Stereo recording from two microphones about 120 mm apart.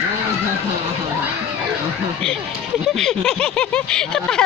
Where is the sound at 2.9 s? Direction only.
Centre (ahead or behind).